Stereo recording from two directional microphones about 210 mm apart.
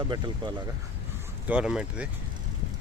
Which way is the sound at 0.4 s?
20° right (ahead or behind).